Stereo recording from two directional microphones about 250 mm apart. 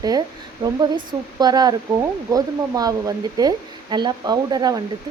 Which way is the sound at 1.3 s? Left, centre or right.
Centre.